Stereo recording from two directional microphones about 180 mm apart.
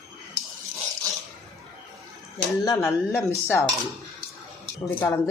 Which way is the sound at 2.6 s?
15° left (ahead or behind).